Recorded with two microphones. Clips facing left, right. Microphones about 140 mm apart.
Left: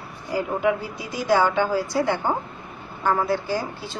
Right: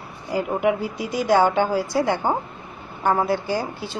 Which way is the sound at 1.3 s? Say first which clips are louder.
Right 1 dB; 20° right (ahead or behind).